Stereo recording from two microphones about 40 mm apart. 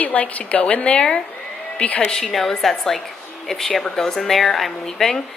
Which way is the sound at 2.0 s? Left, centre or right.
Centre.